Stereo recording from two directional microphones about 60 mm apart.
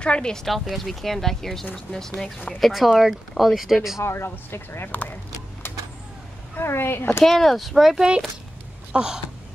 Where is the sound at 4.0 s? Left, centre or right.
Left.